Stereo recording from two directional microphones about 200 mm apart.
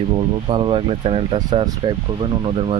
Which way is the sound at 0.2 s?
25° right (ahead or behind).